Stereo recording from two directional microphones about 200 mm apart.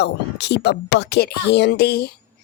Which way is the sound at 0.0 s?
60° left (ahead or behind).